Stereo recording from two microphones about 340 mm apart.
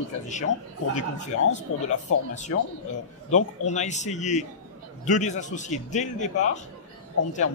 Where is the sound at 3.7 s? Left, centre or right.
Left.